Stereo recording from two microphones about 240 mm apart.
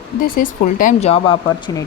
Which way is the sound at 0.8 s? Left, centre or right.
Left.